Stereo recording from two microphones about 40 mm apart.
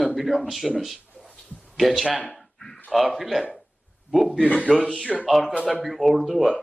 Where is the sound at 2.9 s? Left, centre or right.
Centre.